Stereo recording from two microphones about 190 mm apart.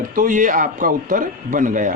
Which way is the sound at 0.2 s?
45° right (ahead or behind).